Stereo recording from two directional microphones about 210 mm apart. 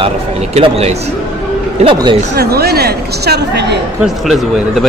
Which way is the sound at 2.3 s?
50° right (ahead or behind).